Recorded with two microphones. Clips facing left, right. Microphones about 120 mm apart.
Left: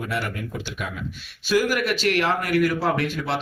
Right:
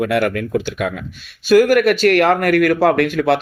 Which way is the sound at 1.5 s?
55° right (ahead or behind).